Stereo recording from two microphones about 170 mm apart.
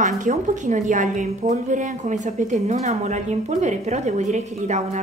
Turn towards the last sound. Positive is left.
turn(degrees=-45)  # may be behind; listen again after turning